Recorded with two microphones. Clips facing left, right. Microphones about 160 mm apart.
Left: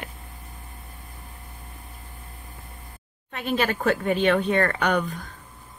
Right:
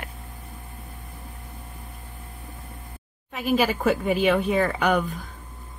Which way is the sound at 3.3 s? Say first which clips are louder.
Right 2 dB; 5° right (ahead or behind).